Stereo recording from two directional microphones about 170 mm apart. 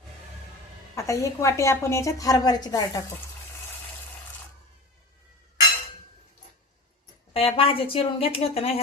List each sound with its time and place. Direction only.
0.9 s a woman's voice: 20° left (ahead or behind)
7.3 s a woman's voice: 35° left (ahead or behind)